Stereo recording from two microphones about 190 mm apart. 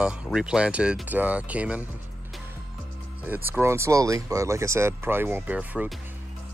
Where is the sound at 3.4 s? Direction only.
10° right (ahead or behind).